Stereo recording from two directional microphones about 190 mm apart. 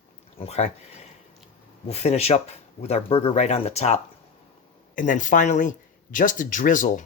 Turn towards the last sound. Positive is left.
turn(degrees=45)  # may be behind; listen again after turning